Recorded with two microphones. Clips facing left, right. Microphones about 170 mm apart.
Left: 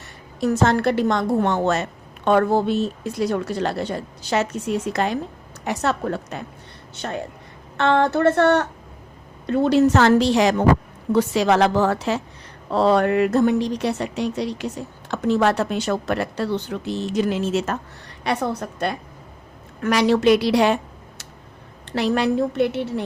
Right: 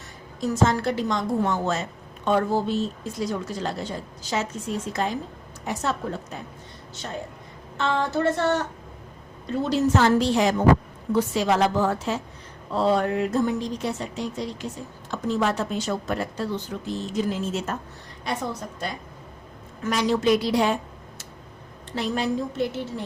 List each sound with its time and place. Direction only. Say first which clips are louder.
0.3 s a woman's voice: left 4 dB; 65° left (ahead or behind)
18.2 s a woman's voice: left 6 dB; 70° left (ahead or behind)
21.9 s speech: left 6 dB; 70° left (ahead or behind)